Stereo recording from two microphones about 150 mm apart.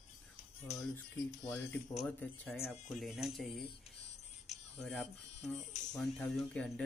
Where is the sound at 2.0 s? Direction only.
10° left (ahead or behind).